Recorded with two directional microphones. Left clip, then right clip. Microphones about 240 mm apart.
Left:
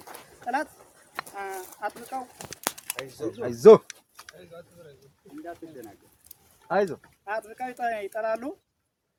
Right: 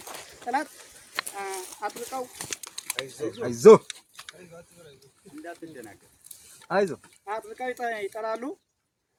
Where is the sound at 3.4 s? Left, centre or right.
Right.